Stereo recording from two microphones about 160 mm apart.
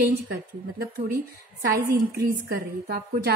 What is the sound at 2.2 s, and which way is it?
A woman's voice, 80° right.